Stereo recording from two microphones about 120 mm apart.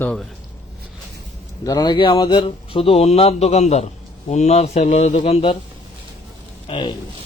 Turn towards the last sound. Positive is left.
turn(degrees=45)  # may be behind; listen again after turning